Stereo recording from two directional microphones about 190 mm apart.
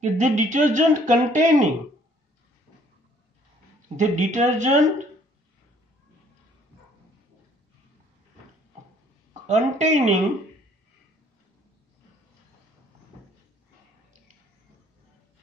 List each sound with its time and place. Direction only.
0.0 s speech: 40° right (ahead or behind)
3.9 s speech: 40° right (ahead or behind)
9.5 s speech: 40° right (ahead or behind)